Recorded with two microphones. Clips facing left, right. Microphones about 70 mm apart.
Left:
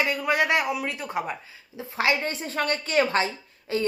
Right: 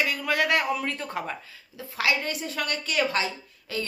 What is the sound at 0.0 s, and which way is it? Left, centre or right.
Speech, left.